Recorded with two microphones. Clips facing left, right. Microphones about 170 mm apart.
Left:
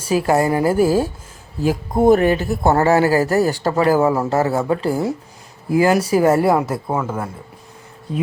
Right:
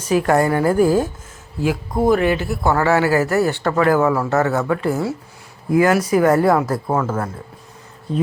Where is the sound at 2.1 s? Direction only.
40° left (ahead or behind); by 7.3 s 15° left (ahead or behind).